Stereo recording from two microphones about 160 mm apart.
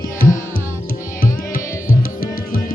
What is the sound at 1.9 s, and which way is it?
Music, 60° left (ahead or behind).